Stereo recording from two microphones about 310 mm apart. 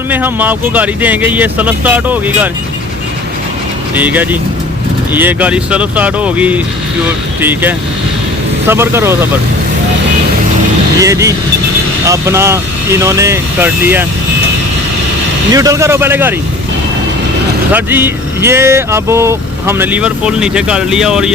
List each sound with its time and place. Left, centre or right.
0.1 s speech: centre
3.9 s speech: centre
11.0 s speech: centre
15.5 s speech: centre
17.7 s speech: centre